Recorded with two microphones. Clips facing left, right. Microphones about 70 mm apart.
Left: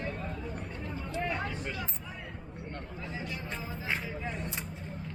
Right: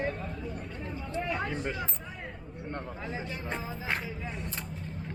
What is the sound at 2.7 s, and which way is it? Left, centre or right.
Speech, right.